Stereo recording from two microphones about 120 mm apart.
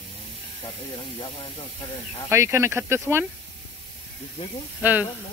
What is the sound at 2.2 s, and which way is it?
Speech, 25° right (ahead or behind).